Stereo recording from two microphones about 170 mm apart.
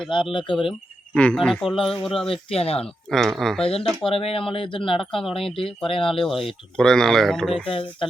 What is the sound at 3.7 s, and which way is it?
Speech, 35° left (ahead or behind).